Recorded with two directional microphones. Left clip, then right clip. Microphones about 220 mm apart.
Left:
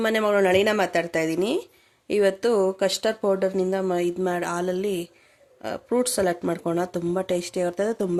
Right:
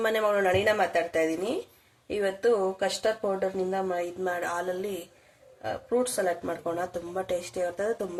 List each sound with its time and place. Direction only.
0.0 s speech: 45° left (ahead or behind)